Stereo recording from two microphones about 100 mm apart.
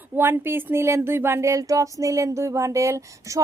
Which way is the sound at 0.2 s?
20° right (ahead or behind).